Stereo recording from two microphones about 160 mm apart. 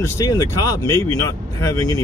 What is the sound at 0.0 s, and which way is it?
Speech, 20° left (ahead or behind).